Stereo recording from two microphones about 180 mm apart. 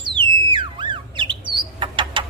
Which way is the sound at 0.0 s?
25° right (ahead or behind).